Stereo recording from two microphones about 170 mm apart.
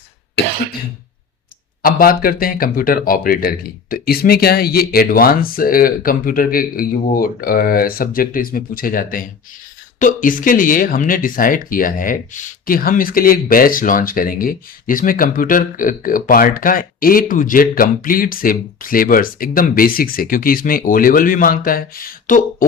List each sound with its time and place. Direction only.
2.0 s speech: 60° left (ahead or behind)